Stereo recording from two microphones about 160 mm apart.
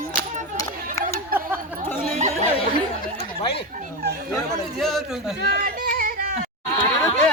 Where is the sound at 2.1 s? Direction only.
45° right (ahead or behind).